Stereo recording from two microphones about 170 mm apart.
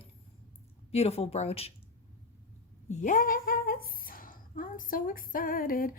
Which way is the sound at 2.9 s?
50° left (ahead or behind).